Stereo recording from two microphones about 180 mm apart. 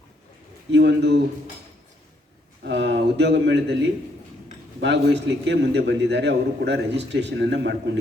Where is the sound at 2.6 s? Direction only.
70° right (ahead or behind).